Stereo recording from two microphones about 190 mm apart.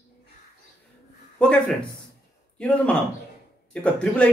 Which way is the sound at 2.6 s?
5° left (ahead or behind).